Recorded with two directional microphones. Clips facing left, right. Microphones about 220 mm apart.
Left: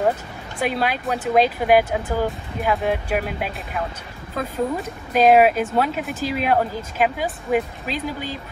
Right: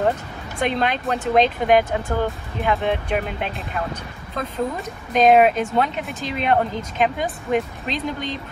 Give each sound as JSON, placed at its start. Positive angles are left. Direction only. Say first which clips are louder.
{"t": 0.6, "sound": "speech", "louder": "right 1 dB", "side_deg": 5}